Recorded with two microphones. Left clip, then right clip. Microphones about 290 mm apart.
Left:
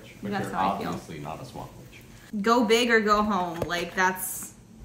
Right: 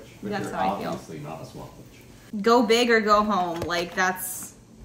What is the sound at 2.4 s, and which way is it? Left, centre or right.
Speech, centre.